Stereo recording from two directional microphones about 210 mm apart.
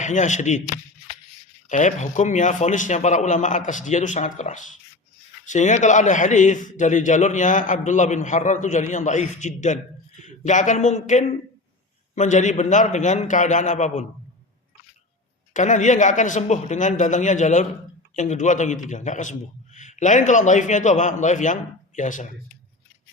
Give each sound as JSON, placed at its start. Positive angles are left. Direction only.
{"t": 0.0, "sound": "a man's voice", "side_deg": 35}
{"t": 1.7, "sound": "a man's voice", "side_deg": 35}
{"t": 15.5, "sound": "a man's voice", "side_deg": 35}